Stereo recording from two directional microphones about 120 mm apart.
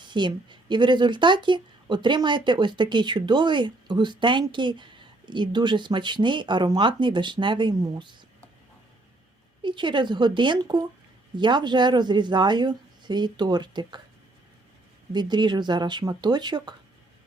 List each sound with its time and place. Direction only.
0.0 s a woman's voice: 40° right (ahead or behind)
9.6 s a woman's voice: 40° right (ahead or behind)
15.1 s a woman's voice: 35° right (ahead or behind)